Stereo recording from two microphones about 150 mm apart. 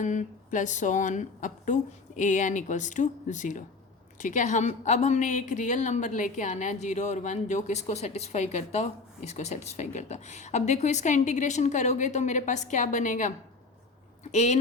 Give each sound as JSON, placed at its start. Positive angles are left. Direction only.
{"t": 0.0, "sound": "a woman's voice", "side_deg": 55}